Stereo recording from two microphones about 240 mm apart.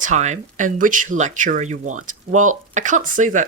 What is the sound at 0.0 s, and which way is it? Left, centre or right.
Speech, right.